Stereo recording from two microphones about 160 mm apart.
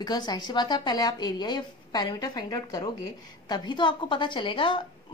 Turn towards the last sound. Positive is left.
turn(degrees=30)  # may be behind; listen again after turning